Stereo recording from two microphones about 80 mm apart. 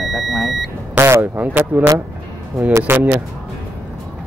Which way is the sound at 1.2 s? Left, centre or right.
Right.